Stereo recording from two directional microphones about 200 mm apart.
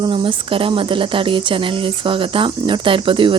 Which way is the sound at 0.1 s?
25° right (ahead or behind).